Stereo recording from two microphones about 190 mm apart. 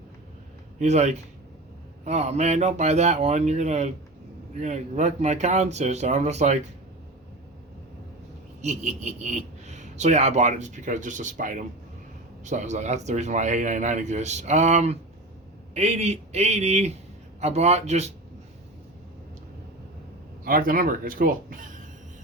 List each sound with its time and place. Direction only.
0.8 s speech: 35° right (ahead or behind)
8.6 s speech: 35° right (ahead or behind)
20.4 s speech: 50° right (ahead or behind)